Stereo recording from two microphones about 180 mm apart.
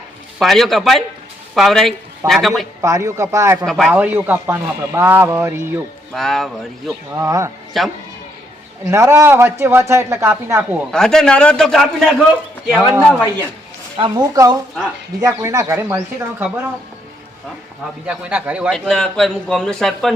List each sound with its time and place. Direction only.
0.3 s a man's voice: centre (ahead or behind)
2.8 s speech: 15° right (ahead or behind)
3.7 s speech: centre (ahead or behind)
6.1 s a man's voice: centre (ahead or behind)
7.2 s speech: 15° right (ahead or behind)
7.8 s a man's voice: centre (ahead or behind)
8.9 s speech: 15° right (ahead or behind)
10.9 s a man's voice: 5° left (ahead or behind)
13.9 s a woman's voice: 25° right (ahead or behind)
18.0 s speech: 5° right (ahead or behind)
18.7 s a man's voice: 5° left (ahead or behind)